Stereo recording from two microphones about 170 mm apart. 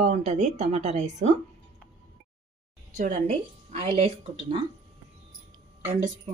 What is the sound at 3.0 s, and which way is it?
Speech, 45° right (ahead or behind).